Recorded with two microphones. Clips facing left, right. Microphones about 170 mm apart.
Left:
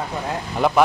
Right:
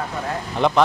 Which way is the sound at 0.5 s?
5° left (ahead or behind).